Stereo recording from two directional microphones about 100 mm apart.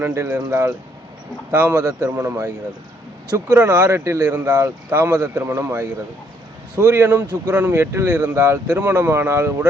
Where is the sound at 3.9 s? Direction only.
30° right (ahead or behind).